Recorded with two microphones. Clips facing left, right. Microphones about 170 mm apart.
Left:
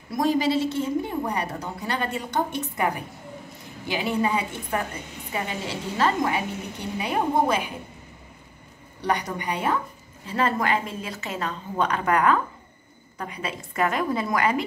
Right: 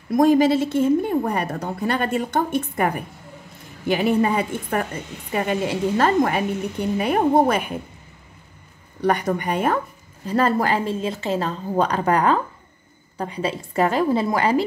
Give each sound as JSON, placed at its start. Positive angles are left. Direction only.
{"t": 0.1, "sound": "a woman's voice", "side_deg": -50}
{"t": 9.0, "sound": "a woman's voice", "side_deg": -50}
{"t": 10.2, "sound": "a woman's voice", "side_deg": -40}